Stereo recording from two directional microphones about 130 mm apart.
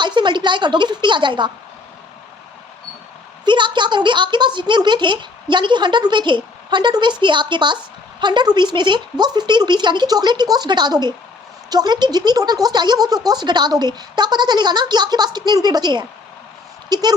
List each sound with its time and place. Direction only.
0.0 s a woman's voice: 35° right (ahead or behind)
3.4 s a woman's voice: 35° right (ahead or behind)